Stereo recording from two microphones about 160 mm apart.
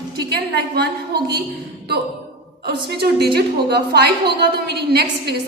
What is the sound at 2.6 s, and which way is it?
A woman's voice, 90° right.